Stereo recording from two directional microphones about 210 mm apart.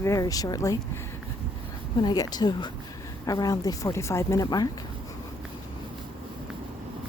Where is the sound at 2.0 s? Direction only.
20° left (ahead or behind).